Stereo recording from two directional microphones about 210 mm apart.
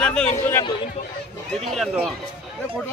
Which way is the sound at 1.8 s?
Centre (ahead or behind).